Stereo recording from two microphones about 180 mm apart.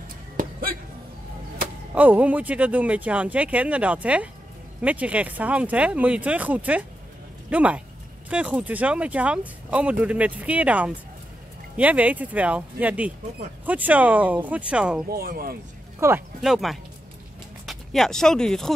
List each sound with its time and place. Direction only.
0.4 s music: 55° right (ahead or behind)
2.0 s speech: 10° right (ahead or behind)
15.0 s speech: 60° right (ahead or behind)
16.0 s speech: 15° right (ahead or behind)
16.3 s speech: centre (ahead or behind)